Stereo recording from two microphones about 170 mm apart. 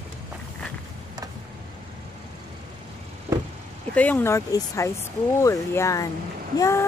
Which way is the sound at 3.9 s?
10° left (ahead or behind).